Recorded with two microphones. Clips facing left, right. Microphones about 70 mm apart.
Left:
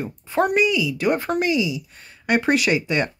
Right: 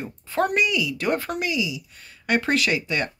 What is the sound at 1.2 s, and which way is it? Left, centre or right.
Speech, left.